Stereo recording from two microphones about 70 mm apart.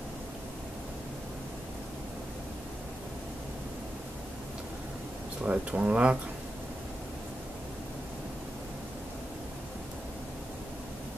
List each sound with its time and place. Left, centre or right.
5.4 s speech: centre